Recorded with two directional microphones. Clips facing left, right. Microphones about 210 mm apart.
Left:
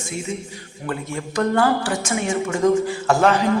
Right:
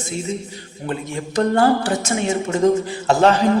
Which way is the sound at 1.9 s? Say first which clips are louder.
Right 2 dB; 35° right (ahead or behind).